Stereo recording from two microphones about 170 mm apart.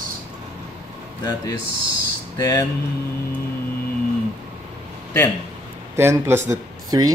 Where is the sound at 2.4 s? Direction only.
20° left (ahead or behind).